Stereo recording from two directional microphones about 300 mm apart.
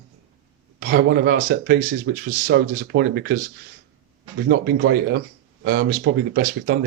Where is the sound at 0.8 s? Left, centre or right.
Right.